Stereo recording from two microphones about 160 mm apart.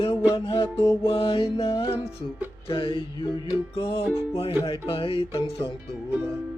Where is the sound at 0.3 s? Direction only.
30° left (ahead or behind).